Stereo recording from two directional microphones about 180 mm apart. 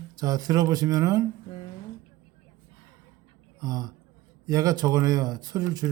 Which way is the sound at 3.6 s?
20° right (ahead or behind).